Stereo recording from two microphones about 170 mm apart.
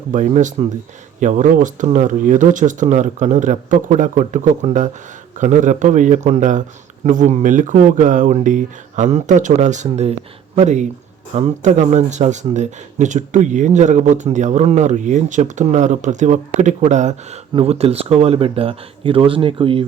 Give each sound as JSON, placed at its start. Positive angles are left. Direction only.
{"t": 0.1, "sound": "speech", "side_deg": -45}